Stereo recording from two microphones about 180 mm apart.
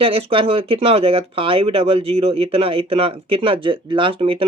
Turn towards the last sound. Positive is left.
turn(degrees=-30)  # may be behind; listen again after turning